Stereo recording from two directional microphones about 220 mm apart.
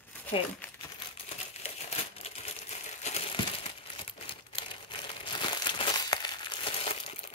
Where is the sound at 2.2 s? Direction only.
30° left (ahead or behind).